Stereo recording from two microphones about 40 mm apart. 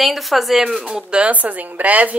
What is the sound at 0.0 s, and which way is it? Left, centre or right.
Speech, centre.